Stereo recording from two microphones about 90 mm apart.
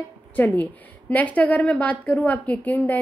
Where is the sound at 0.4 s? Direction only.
20° left (ahead or behind).